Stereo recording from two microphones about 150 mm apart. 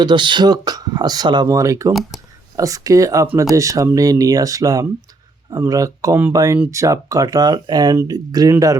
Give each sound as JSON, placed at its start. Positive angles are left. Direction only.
{"t": 0.0, "sound": "speech", "side_deg": -30}
{"t": 1.9, "sound": "speech", "side_deg": 0}
{"t": 2.6, "sound": "speech", "side_deg": -20}